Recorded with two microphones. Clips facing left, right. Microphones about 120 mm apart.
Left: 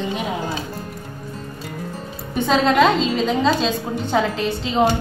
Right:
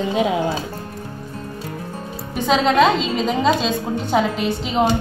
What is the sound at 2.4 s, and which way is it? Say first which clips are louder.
Speech: right 1 dB; centre (ahead or behind).